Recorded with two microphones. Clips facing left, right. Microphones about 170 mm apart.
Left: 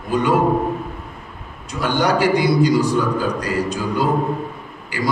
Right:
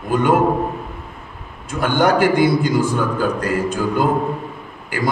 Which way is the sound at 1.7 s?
50° right (ahead or behind).